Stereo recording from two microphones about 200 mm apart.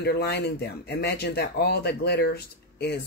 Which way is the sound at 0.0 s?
55° left (ahead or behind).